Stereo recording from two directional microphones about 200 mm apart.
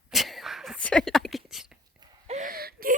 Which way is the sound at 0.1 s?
Centre (ahead or behind).